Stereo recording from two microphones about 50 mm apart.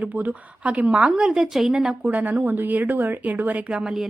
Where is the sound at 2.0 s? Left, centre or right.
Right.